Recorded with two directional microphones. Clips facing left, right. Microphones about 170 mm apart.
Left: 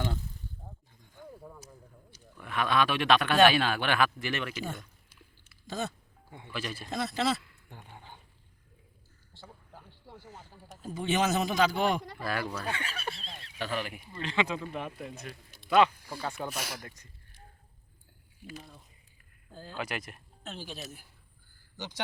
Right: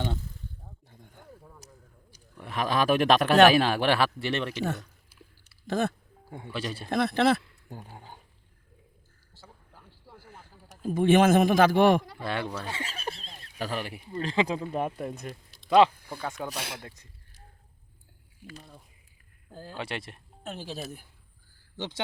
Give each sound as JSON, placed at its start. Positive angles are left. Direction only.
{"t": 0.9, "sound": "a sound", "side_deg": -60}
{"t": 2.4, "sound": "speech", "side_deg": -35}
{"t": 5.6, "sound": "speech", "side_deg": -60}
{"t": 6.3, "sound": "speech", "side_deg": -35}
{"t": 6.9, "sound": "speech", "side_deg": -60}
{"t": 7.4, "sound": "a sound", "side_deg": -40}
{"t": 10.8, "sound": "a man's voice", "side_deg": -55}
{"t": 12.2, "sound": "speech", "side_deg": -25}
{"t": 13.4, "sound": "speech", "side_deg": -40}
{"t": 15.8, "sound": "speech", "side_deg": -30}
{"t": 19.7, "sound": "speech", "side_deg": -30}